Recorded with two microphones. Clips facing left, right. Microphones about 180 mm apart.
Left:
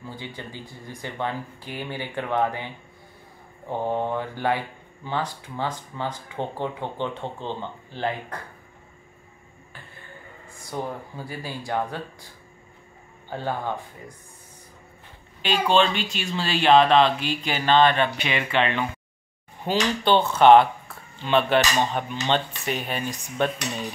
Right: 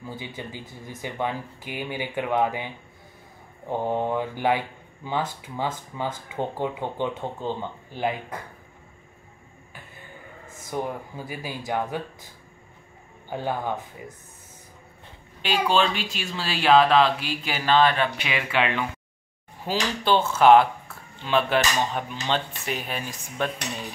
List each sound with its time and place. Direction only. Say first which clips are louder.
0.2 s speech: right 1 dB; 15° right (ahead or behind)
10.6 s speech: right 1 dB; 15° right (ahead or behind)
13.3 s speech: right 1 dB; 15° right (ahead or behind)
15.4 s speech: left 2 dB; 5° right (ahead or behind)